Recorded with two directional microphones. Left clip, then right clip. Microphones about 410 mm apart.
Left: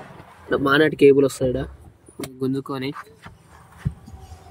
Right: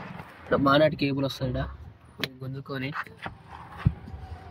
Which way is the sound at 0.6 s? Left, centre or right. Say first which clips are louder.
Left 7 dB; centre.